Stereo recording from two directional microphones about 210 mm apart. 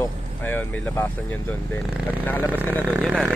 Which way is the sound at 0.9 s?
10° left (ahead or behind).